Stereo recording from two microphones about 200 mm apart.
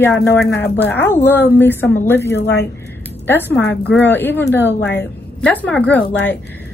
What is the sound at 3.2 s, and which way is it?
Speech, 10° left (ahead or behind).